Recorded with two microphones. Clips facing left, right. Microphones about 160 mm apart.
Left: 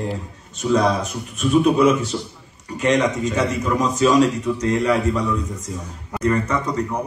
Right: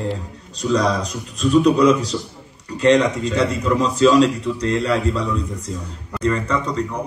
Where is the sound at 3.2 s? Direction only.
30° right (ahead or behind).